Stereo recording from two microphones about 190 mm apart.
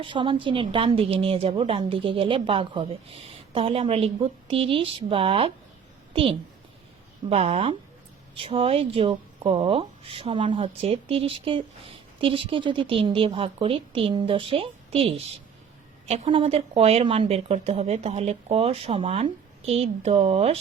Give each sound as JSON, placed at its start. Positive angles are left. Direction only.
{"t": 0.0, "sound": "speech", "side_deg": -25}
{"t": 7.3, "sound": "speech", "side_deg": -35}